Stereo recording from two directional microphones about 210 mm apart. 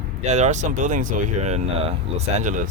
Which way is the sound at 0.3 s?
35° right (ahead or behind).